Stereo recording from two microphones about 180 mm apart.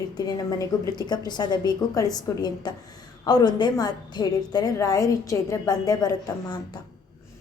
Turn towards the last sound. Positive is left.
turn(degrees=20)  # may be behind; listen again after turning